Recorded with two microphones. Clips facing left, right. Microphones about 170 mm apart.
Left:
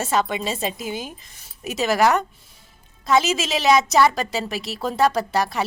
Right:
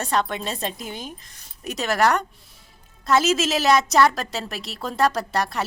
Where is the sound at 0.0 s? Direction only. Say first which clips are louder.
Left 2 dB; 5° left (ahead or behind).